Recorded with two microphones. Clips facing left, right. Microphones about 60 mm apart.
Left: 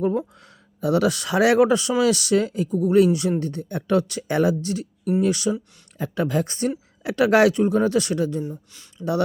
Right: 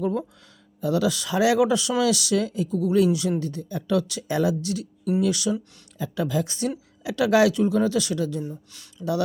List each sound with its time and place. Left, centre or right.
0.8 s speech: left
6.0 s speech: left
8.4 s speech: centre